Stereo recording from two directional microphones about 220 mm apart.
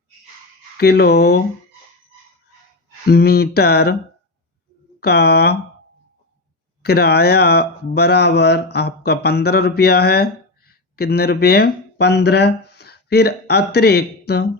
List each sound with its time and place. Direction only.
0.8 s speech: 45° left (ahead or behind)
3.1 s speech: 45° left (ahead or behind)
4.9 s speech: 45° left (ahead or behind)
6.8 s speech: 45° left (ahead or behind)